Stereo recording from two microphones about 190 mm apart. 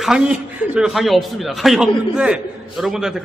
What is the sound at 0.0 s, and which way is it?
A man's voice, 5° right (ahead or behind).